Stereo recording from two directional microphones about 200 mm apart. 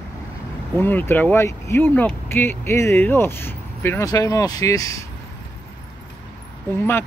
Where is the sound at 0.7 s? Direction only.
10° left (ahead or behind).